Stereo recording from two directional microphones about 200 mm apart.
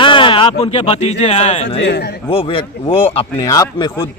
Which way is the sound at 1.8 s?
60° left (ahead or behind).